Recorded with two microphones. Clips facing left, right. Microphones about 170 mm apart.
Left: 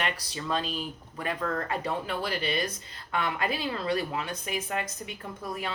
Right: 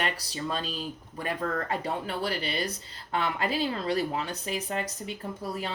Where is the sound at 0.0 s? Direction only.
35° right (ahead or behind).